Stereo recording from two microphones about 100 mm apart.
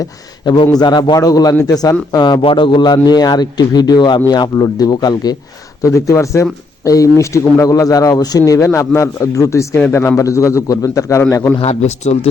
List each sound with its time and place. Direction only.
0.0 s speech: 50° left (ahead or behind)
2.4 s a man's voice: 60° left (ahead or behind); by 5.4 s 45° left (ahead or behind)
5.8 s speech: 30° left (ahead or behind)
11.6 s speech: 90° left